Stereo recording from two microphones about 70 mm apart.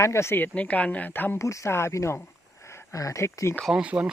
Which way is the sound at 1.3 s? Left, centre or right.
Left.